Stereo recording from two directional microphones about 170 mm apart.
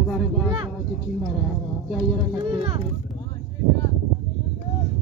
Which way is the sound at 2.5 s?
30° right (ahead or behind).